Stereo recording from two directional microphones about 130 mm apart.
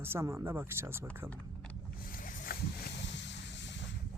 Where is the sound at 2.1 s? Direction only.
90° left.